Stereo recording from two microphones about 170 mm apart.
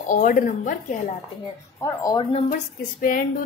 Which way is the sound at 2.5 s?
55° left (ahead or behind).